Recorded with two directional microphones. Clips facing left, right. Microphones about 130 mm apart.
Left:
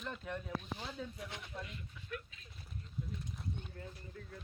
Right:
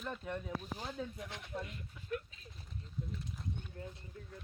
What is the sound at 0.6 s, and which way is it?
Speech, 45° right (ahead or behind).